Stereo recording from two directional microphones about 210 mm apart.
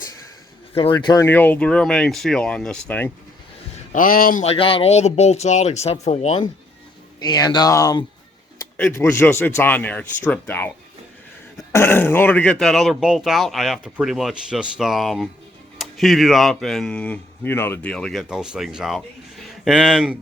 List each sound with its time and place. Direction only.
0.9 s speech: 15° left (ahead or behind)
3.9 s speech: 40° left (ahead or behind)
4.4 s speech: 25° left (ahead or behind)
7.2 s speech: 20° left (ahead or behind)
11.7 s speech: 10° left (ahead or behind)